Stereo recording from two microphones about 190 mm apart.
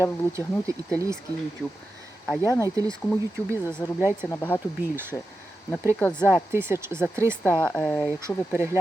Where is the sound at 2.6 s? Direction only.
20° right (ahead or behind).